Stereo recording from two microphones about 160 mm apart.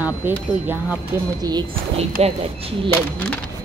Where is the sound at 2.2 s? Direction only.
40° right (ahead or behind).